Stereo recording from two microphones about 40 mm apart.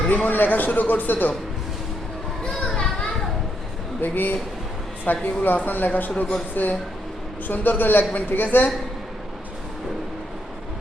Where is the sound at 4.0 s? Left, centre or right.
Left.